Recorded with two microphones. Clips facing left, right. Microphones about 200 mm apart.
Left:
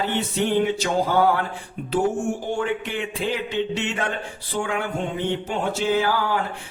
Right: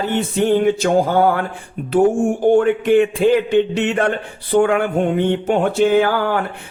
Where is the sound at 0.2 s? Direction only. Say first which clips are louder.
Right 6 dB; 50° right (ahead or behind).